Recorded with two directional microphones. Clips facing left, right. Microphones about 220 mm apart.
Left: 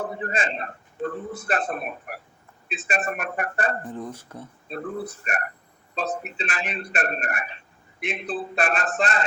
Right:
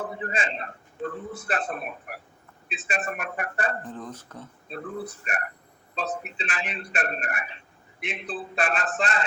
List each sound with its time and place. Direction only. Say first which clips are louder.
0.0 s a man's voice: left 3 dB; 45° left (ahead or behind)
3.8 s speech: left 3 dB; 10° left (ahead or behind)
5.2 s a man's voice: left 3 dB; 45° left (ahead or behind)